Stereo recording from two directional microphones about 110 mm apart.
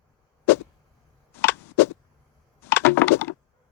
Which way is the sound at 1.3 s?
20° left (ahead or behind).